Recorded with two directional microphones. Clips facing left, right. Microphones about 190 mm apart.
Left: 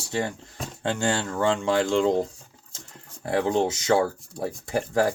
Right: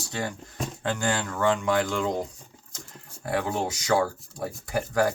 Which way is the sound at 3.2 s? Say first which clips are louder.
Left 5 dB; 25° left (ahead or behind).